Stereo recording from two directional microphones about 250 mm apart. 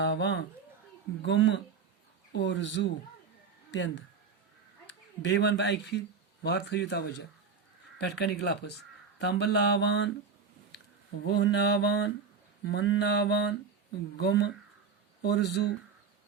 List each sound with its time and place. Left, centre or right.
0.0 s speech: left
5.2 s speech: left
11.3 s speech: left